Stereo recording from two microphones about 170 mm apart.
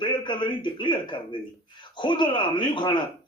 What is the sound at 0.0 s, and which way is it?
A man's voice, 30° left (ahead or behind).